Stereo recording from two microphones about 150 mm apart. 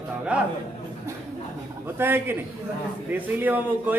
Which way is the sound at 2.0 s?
15° right (ahead or behind).